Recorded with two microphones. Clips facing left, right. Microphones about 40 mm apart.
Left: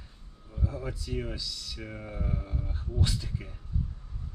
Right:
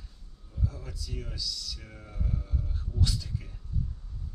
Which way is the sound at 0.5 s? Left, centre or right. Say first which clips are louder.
Left 4 dB; left.